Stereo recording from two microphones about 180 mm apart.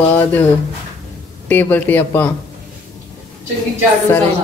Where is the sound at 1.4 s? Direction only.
10° left (ahead or behind).